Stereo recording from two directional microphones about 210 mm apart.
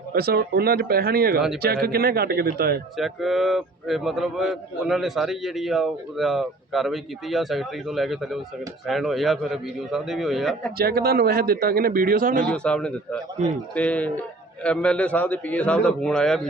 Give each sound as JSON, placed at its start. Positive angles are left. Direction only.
{"t": 0.1, "sound": "speech", "side_deg": -50}
{"t": 3.0, "sound": "speech", "side_deg": 0}
{"t": 10.8, "sound": "speech", "side_deg": -45}
{"t": 12.5, "sound": "speech", "side_deg": 5}